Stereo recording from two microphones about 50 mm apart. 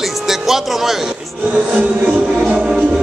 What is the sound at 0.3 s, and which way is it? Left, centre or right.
Speech, centre.